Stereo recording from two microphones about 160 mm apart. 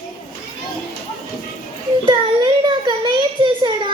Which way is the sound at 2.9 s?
30° right (ahead or behind).